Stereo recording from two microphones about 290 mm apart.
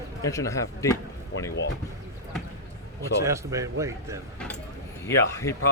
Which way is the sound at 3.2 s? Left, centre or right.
Centre.